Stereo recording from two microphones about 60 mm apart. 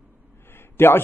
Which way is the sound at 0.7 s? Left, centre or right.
Left.